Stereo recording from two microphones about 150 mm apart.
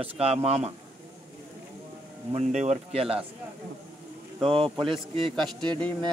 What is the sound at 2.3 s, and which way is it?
Speech, 50° right (ahead or behind).